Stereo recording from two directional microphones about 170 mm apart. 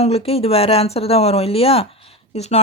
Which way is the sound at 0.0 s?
35° left (ahead or behind).